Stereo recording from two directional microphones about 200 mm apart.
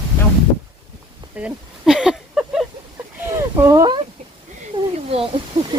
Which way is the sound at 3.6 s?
20° right (ahead or behind).